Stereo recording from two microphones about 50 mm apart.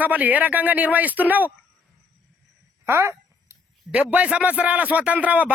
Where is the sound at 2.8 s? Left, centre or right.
Right.